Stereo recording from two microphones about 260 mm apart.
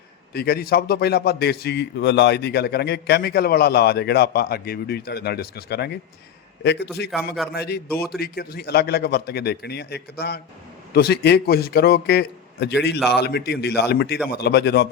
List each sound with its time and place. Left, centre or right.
0.3 s a man's voice: left
7.1 s a man's voice: centre
7.5 s a man's voice: left